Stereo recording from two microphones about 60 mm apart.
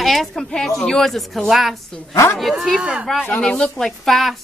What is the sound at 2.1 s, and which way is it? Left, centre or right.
Speech, left.